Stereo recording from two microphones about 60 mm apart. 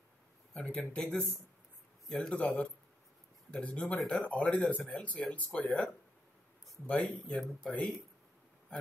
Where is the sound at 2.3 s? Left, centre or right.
Left.